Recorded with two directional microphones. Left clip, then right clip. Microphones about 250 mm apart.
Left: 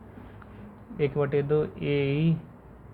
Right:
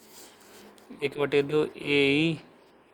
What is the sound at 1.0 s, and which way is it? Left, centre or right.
Speech, right.